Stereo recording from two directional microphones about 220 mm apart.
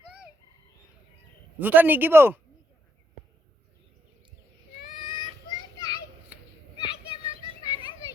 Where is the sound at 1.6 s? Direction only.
10° right (ahead or behind).